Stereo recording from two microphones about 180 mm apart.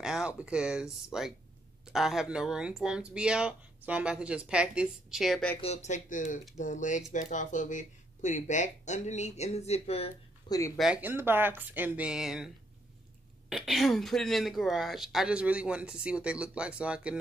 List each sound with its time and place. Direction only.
0.0 s speech: 5° right (ahead or behind)
5.6 s speech: 40° left (ahead or behind)
10.8 s speech: 5° right (ahead or behind)
13.5 s speech: centre (ahead or behind)